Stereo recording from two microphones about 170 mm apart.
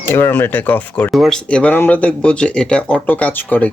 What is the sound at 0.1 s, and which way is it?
Speech, 15° left (ahead or behind).